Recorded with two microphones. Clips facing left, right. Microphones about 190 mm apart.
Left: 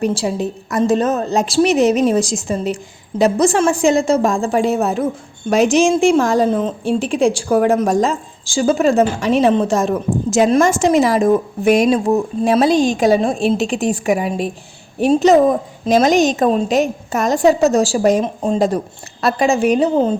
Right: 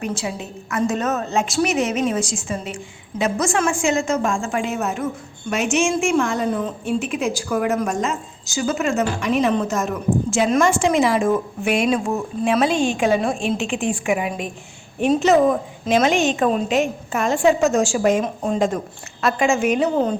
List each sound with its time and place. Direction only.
0.0 s a woman's voice: 35° left (ahead or behind)